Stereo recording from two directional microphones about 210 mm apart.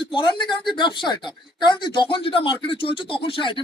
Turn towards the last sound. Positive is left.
turn(degrees=25)  # may be behind; listen again after turning